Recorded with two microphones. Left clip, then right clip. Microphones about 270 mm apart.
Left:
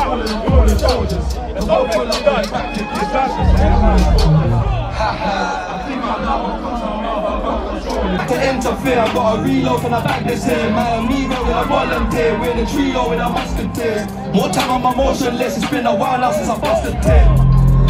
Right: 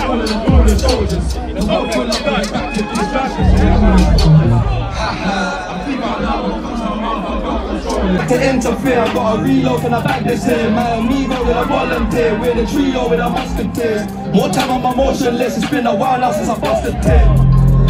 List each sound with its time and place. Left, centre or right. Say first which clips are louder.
1.7 s speech: left 2 dB; left
3.8 s music: right 1 dB; left
8.3 s speech: right 3 dB; left
8.8 s music: left 1 dB; centre